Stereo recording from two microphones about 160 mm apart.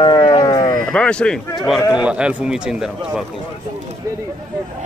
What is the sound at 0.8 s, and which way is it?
Speech, 5° left (ahead or behind).